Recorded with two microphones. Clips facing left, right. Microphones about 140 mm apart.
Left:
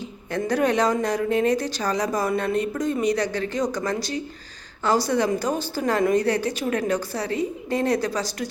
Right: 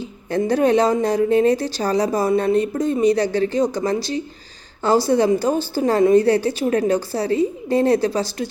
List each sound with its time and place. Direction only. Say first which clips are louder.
0.3 s a woman's voice: right 5 dB; 30° right (ahead or behind)